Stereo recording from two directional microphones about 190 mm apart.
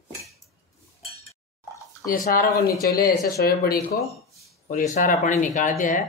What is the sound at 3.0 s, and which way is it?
Speech, 55° left (ahead or behind).